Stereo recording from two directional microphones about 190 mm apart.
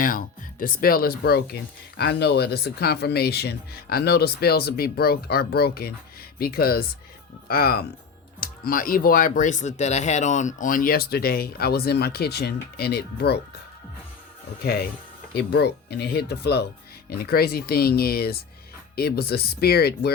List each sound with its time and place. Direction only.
0.0 s speech: 45° left (ahead or behind)
15.3 s speech: 60° left (ahead or behind)